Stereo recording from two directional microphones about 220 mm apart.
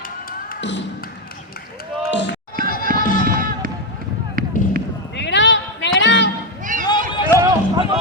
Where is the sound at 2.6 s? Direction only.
40° right (ahead or behind).